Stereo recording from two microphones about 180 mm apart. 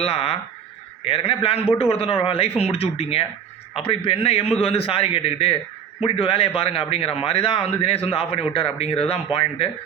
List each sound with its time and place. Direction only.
0.0 s a man's voice: 35° left (ahead or behind)